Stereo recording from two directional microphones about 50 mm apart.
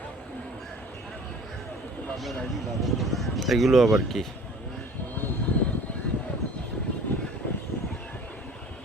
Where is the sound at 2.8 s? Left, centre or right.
Centre.